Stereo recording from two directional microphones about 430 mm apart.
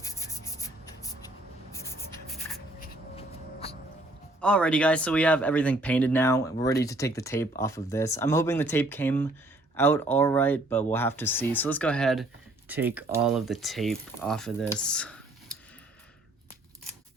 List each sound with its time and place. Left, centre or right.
0.0 s rub: centre
1.7 s writing: centre
2.8 s a sound: centre
4.4 s speech: centre